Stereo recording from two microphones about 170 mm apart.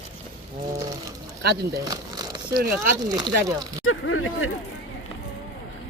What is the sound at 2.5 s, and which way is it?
Speech, 60° right (ahead or behind).